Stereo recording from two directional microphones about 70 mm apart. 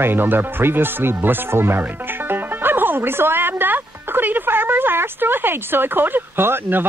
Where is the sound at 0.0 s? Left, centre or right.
Right.